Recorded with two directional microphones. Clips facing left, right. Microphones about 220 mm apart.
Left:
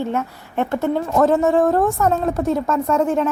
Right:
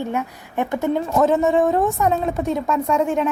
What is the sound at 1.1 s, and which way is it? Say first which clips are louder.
A woman's voice: left 2 dB; centre (ahead or behind).